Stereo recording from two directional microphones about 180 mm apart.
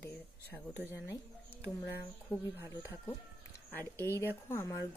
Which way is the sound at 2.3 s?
10° left (ahead or behind).